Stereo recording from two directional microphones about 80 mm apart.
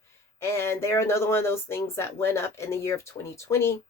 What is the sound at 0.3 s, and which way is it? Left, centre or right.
A woman's voice, left.